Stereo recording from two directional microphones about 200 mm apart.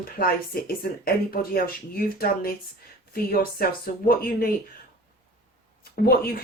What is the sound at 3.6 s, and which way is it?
Speech, 50° left (ahead or behind).